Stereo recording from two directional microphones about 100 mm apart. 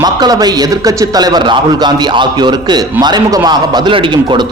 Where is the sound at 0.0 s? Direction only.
40° right (ahead or behind).